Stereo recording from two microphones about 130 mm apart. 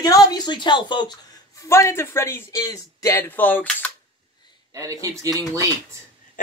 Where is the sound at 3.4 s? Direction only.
15° left (ahead or behind).